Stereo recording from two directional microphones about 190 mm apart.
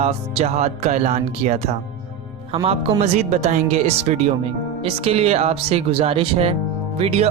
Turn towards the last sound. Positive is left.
turn(degrees=-30)  # may be behind; listen again after turning